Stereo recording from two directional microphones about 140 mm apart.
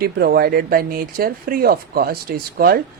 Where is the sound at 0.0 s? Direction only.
90° right.